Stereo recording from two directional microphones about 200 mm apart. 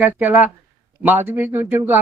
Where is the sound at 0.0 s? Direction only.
10° right (ahead or behind).